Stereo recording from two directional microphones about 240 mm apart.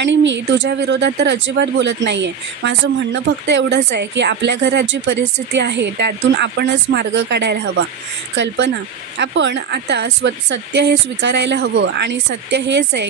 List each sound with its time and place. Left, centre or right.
0.0 s speech: right